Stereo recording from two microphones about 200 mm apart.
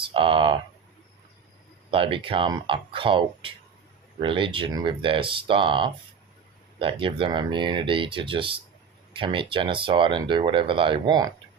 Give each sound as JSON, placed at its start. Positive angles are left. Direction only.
{"t": 0.0, "sound": "speech", "side_deg": -25}
{"t": 1.9, "sound": "speech", "side_deg": -25}